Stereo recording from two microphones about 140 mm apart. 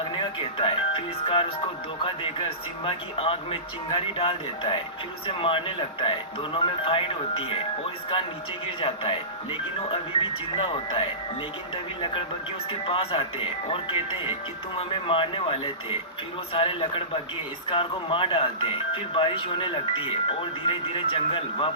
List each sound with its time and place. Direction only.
0.1 s speech: 40° left (ahead or behind)
8.6 s speech: 40° left (ahead or behind)
12.8 s speech: 40° left (ahead or behind)